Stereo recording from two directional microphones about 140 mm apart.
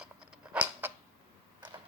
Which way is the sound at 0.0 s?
5° right (ahead or behind).